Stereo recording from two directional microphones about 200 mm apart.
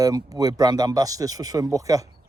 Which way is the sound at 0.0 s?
15° right (ahead or behind).